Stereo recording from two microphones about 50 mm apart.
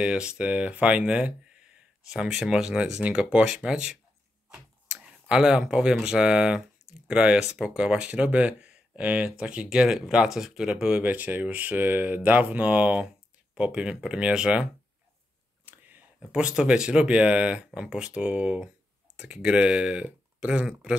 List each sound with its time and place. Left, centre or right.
0.0 s speech: centre
15.6 s a sound: right
16.2 s speech: centre